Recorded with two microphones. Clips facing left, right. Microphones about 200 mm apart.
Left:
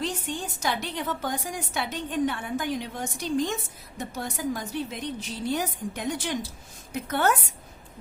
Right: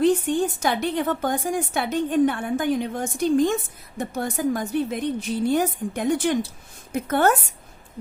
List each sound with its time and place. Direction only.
0.0 s a woman's voice: 55° right (ahead or behind)